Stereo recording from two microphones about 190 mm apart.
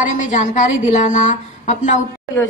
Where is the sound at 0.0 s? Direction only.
40° left (ahead or behind).